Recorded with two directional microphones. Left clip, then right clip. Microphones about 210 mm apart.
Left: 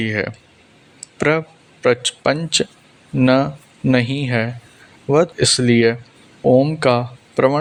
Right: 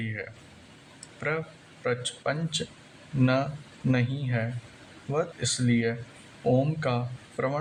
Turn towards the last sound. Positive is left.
turn(degrees=40)  # may be behind; listen again after turning